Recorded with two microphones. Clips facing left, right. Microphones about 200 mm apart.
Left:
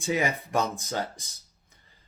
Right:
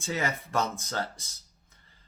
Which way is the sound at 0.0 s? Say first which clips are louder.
Left 4 dB; 15° left (ahead or behind).